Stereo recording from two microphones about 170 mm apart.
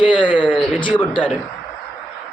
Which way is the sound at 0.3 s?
10° right (ahead or behind).